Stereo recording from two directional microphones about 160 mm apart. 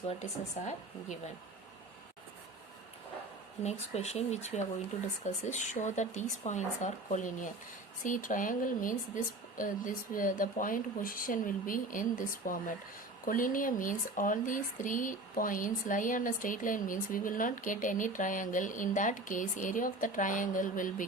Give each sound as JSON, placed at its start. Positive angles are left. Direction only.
{"t": 0.1, "sound": "speech", "side_deg": 45}
{"t": 3.6, "sound": "speech", "side_deg": 45}